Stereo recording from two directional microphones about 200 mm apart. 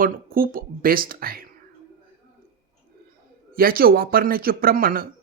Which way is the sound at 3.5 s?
45° right (ahead or behind).